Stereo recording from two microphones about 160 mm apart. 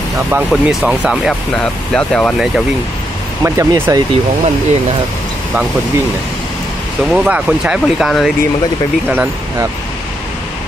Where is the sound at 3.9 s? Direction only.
20° right (ahead or behind).